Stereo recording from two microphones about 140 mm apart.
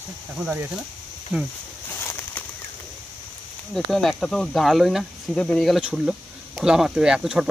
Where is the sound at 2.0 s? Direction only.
15° left (ahead or behind).